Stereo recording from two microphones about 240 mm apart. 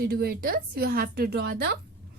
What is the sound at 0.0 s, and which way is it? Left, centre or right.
Speech, right.